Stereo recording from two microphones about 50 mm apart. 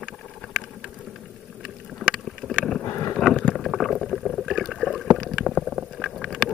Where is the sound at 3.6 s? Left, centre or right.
Centre.